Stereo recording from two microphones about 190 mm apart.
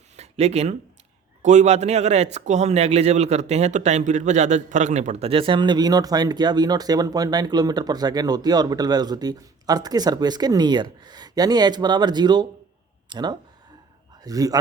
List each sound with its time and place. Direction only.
0.2 s a man's voice: 35° right (ahead or behind)